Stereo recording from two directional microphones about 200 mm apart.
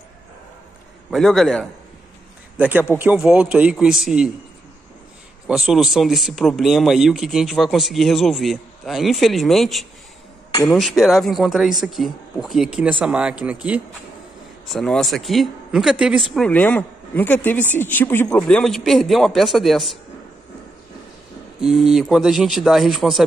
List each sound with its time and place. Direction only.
1.1 s speech: centre (ahead or behind)
5.5 s speech: centre (ahead or behind)
21.5 s speech: centre (ahead or behind)